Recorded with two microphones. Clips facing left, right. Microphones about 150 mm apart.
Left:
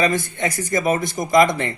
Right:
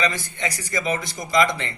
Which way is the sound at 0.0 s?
50° left (ahead or behind).